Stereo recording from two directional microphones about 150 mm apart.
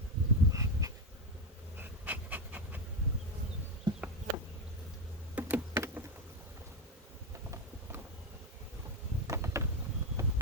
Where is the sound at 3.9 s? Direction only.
30° right (ahead or behind).